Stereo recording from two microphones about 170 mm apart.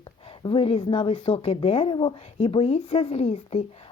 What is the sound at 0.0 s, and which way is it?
A woman's voice, 30° left (ahead or behind).